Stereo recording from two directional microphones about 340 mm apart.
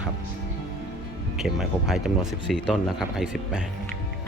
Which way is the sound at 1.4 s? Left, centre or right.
Centre.